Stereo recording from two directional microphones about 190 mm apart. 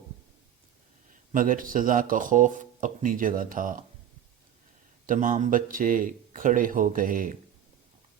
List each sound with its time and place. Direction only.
1.3 s speech: 45° right (ahead or behind)
5.0 s speech: 45° right (ahead or behind)